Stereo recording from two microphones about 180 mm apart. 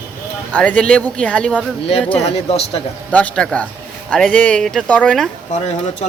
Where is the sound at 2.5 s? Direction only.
35° left (ahead or behind).